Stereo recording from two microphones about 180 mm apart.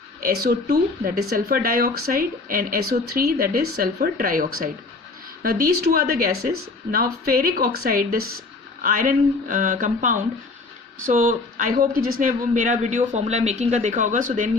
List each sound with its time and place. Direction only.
0.3 s speech: 55° right (ahead or behind)